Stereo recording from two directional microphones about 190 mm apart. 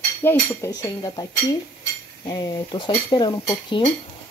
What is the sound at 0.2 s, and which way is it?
Speech, 10° left (ahead or behind).